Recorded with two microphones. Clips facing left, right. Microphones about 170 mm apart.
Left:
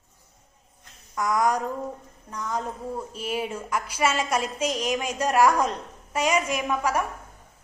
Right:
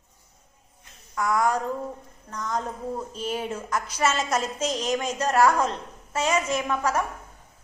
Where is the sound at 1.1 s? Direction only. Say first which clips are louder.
Even; 20° left (ahead or behind).